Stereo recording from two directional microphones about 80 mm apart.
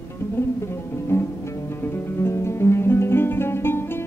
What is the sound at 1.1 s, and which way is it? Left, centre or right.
Music, left.